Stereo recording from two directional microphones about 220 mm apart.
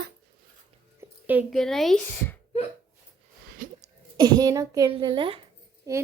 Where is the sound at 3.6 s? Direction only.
40° right (ahead or behind).